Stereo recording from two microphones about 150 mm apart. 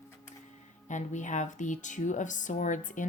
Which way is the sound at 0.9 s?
55° left (ahead or behind).